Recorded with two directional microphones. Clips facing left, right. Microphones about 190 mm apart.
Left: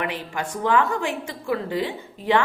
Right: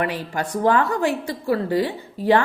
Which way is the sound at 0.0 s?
40° right (ahead or behind).